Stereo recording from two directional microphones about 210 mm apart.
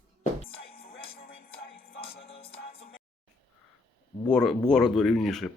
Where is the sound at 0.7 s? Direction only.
45° left (ahead or behind).